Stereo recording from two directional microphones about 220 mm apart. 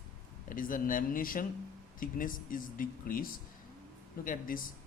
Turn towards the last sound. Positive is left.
turn(degrees=40)  # may be behind; listen again after turning